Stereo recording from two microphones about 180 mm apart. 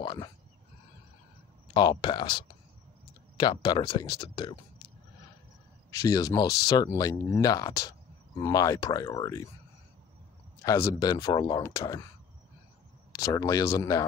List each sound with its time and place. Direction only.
0.0 s speech: 25° left (ahead or behind)
1.7 s speech: 25° left (ahead or behind)
5.9 s speech: 20° left (ahead or behind)
10.6 s speech: 20° left (ahead or behind)
13.1 s speech: 20° left (ahead or behind)